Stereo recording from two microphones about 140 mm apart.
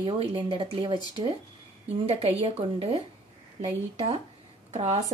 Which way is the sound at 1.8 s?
50° right (ahead or behind).